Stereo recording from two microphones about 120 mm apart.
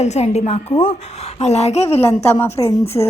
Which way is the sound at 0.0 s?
65° left (ahead or behind).